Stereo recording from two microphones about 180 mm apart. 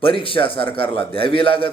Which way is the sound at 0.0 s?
30° left (ahead or behind).